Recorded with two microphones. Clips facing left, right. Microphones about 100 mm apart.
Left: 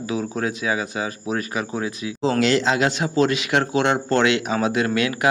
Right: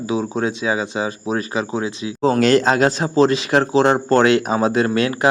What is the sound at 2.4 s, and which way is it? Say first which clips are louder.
A man's voice: right 5 dB; 45° right (ahead or behind).